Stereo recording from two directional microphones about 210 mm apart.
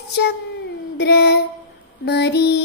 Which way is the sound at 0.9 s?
50° left (ahead or behind).